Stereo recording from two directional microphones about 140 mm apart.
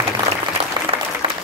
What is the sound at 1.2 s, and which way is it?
Applause, 40° right (ahead or behind).